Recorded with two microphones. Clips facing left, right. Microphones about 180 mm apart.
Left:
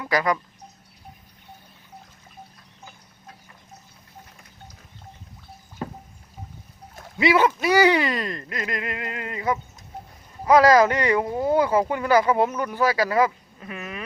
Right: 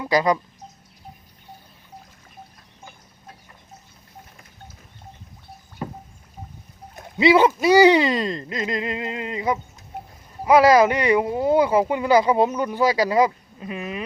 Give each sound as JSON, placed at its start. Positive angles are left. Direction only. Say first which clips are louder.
{"t": 0.0, "sound": "speech", "louder": "right 3 dB", "side_deg": -25}
{"t": 6.9, "sound": "speech", "louder": "right 4 dB", "side_deg": -25}